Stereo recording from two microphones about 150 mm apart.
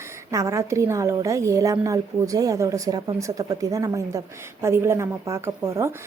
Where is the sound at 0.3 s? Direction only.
20° right (ahead or behind).